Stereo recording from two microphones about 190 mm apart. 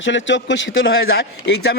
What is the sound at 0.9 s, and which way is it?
Speech, 55° left (ahead or behind).